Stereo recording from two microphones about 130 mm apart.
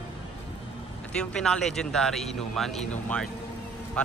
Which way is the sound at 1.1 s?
5° left (ahead or behind).